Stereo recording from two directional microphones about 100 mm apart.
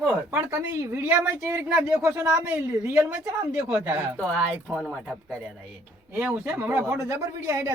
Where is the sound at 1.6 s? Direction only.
10° right (ahead or behind).